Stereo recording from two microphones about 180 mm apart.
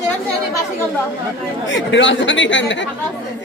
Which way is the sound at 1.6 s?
90° left.